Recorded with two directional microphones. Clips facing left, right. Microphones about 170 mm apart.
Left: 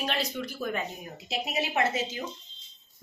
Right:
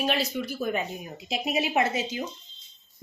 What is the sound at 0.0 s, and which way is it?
A woman's voice, 10° right (ahead or behind).